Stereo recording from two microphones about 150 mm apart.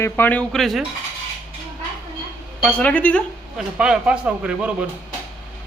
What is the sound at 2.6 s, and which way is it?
Speech, 10° left (ahead or behind).